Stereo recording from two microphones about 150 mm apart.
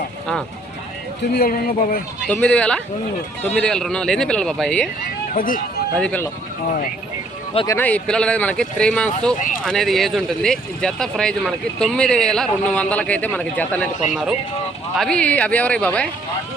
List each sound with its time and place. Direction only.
1.3 s speech: 85° left
2.2 s speech: 10° left (ahead or behind)
5.3 s speech: 65° left (ahead or behind)
6.0 s speech: 10° left (ahead or behind)
7.8 s speech: 10° left (ahead or behind)
14.0 s speech: centre (ahead or behind)